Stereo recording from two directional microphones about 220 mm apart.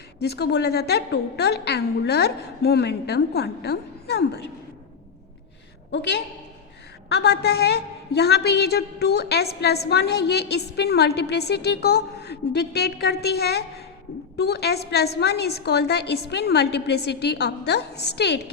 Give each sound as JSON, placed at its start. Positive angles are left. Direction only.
{"t": 0.2, "sound": "a woman's voice", "side_deg": 50}
{"t": 5.9, "sound": "a woman's voice", "side_deg": 50}